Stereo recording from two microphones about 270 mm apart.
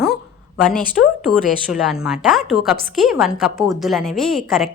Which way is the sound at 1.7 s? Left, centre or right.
Centre.